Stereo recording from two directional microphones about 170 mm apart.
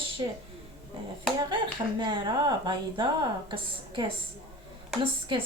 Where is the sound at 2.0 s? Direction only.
25° right (ahead or behind).